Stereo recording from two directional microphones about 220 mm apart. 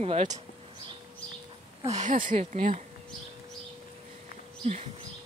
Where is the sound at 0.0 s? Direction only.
30° right (ahead or behind).